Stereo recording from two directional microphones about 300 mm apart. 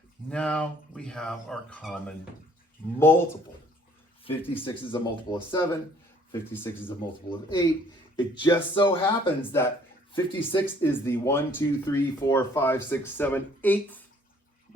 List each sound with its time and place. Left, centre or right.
0.3 s speech: centre
4.3 s speech: centre